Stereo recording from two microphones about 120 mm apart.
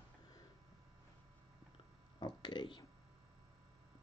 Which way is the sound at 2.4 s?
40° left (ahead or behind).